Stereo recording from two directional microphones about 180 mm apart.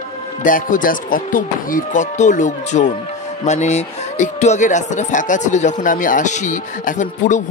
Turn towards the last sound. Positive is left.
turn(degrees=45)  # may be behind; listen again after turning